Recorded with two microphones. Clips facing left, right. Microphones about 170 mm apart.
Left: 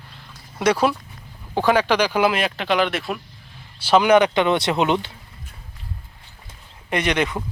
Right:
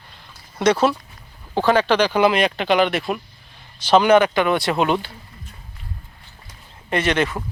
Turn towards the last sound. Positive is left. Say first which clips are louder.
# right 1 dB
turn(degrees=15)  # may be behind; listen again after turning